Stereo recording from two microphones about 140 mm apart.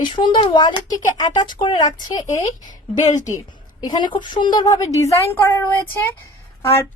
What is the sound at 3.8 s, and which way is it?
Speech, 30° left (ahead or behind).